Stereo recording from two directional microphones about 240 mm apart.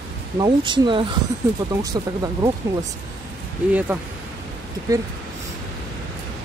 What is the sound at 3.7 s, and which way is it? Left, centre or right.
Speech, centre.